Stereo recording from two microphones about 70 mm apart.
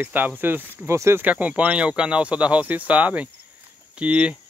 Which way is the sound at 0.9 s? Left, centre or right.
Right.